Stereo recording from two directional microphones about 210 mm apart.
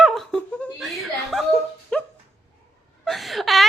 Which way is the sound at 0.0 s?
Centre (ahead or behind).